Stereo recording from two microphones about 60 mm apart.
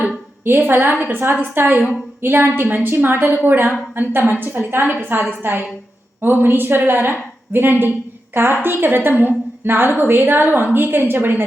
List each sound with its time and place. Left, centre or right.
0.4 s a woman's voice: right
1.2 s a woman's voice: right